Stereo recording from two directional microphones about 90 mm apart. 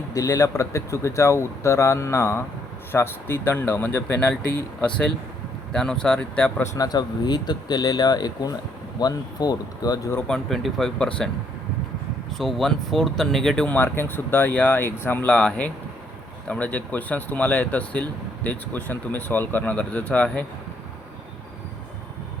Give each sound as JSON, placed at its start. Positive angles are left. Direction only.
{"t": 0.1, "sound": "speech", "side_deg": 40}
{"t": 5.7, "sound": "speech", "side_deg": 10}
{"t": 6.7, "sound": "speech", "side_deg": 45}
{"t": 10.2, "sound": "speech", "side_deg": 5}
{"t": 12.4, "sound": "speech", "side_deg": 0}
{"t": 13.7, "sound": "speech", "side_deg": 25}